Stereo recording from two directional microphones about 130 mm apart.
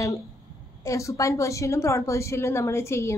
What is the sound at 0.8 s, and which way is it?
A woman's voice, 25° left (ahead or behind).